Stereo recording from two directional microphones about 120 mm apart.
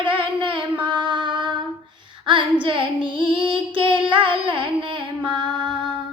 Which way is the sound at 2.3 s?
45° right (ahead or behind).